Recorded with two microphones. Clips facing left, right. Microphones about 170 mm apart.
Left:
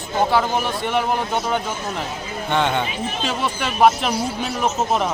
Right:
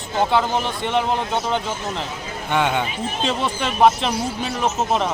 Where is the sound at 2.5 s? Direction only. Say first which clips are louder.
Even; 10° right (ahead or behind).